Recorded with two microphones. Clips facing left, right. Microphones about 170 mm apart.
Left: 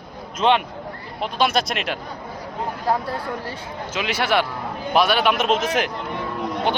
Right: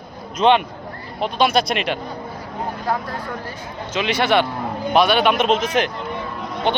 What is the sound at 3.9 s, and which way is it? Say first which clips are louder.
Speech: right 3 dB; 5° left (ahead or behind).